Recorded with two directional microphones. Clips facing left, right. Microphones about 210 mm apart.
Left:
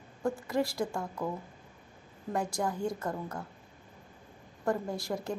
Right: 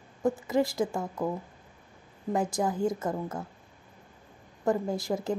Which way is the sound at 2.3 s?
20° right (ahead or behind).